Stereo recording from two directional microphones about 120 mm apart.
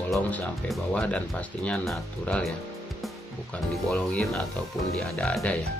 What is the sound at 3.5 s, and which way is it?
Speech, 5° left (ahead or behind).